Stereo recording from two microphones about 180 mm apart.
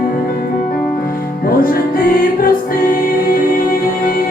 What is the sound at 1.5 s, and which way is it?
Music, 55° left (ahead or behind).